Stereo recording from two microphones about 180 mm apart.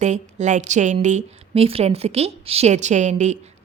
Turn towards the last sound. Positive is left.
turn(degrees=-40)  # may be behind; listen again after turning